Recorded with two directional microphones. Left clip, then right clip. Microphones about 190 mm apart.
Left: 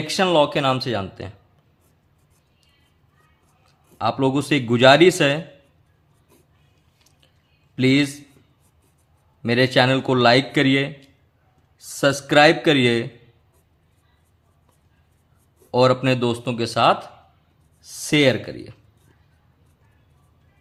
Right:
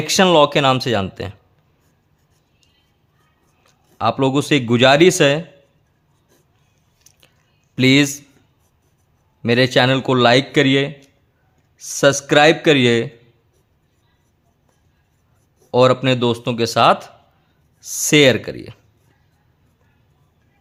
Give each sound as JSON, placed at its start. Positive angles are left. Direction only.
{"t": 0.0, "sound": "speech", "side_deg": -40}
{"t": 3.9, "sound": "a man's voice", "side_deg": -30}
{"t": 7.1, "sound": "squish", "side_deg": -40}
{"t": 7.8, "sound": "speech", "side_deg": -35}
{"t": 9.4, "sound": "a man's voice", "side_deg": -30}
{"t": 15.7, "sound": "a man's voice", "side_deg": -25}